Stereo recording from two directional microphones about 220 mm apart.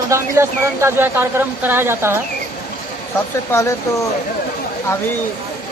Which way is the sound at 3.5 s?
15° left (ahead or behind).